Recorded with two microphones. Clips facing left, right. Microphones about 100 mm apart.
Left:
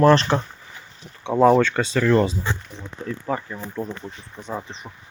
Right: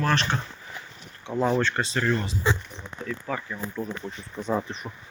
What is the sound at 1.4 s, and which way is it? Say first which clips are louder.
Speech: left 9 dB; 90° left.